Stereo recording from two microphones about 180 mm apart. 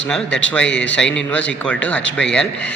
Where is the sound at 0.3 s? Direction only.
80° left.